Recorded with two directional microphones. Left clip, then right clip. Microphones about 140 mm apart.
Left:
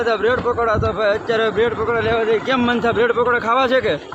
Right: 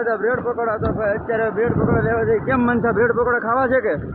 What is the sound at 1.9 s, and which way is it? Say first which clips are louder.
Speech: left 1 dB; 20° left (ahead or behind).